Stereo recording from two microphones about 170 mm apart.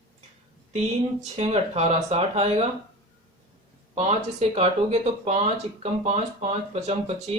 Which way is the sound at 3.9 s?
40° right (ahead or behind).